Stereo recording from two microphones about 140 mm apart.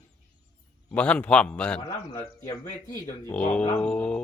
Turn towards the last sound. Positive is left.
turn(degrees=10)  # may be behind; listen again after turning